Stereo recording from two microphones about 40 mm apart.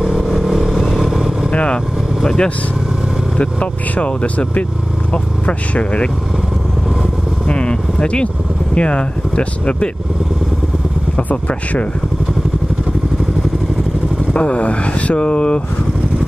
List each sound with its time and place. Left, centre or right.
0.0 s motorcycle: centre
1.5 s vehicle: left
3.9 s speech: left
7.4 s speech: left
14.3 s speech: left